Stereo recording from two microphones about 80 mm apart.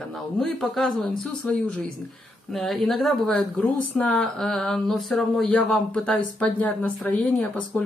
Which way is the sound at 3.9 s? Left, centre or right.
Centre.